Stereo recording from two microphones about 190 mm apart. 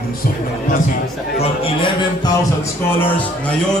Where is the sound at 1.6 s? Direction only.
25° left (ahead or behind).